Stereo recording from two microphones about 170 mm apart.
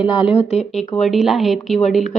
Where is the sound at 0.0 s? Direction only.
30° left (ahead or behind).